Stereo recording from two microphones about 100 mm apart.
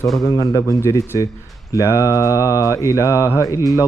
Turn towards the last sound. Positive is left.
turn(degrees=30)  # may be behind; listen again after turning